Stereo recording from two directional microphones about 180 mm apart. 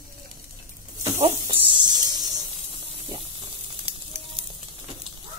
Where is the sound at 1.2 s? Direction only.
25° right (ahead or behind).